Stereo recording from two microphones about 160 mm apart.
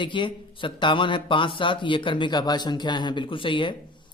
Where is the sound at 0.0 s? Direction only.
30° left (ahead or behind).